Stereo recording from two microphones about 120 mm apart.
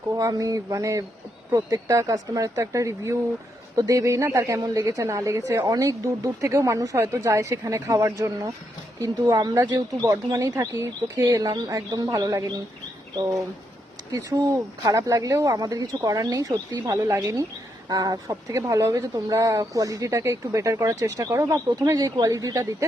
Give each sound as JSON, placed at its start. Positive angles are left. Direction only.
{"t": 0.2, "sound": "speech", "side_deg": -30}